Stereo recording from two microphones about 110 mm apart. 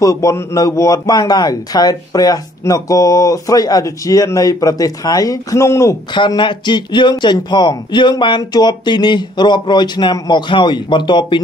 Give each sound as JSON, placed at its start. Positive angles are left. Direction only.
{"t": 0.0, "sound": "a man's voice", "side_deg": 30}
{"t": 6.1, "sound": "a man's voice", "side_deg": 45}